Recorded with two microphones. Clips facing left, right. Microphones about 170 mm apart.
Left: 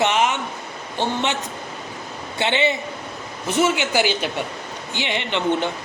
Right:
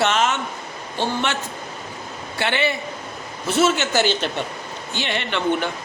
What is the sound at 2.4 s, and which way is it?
A man's voice, 20° left (ahead or behind).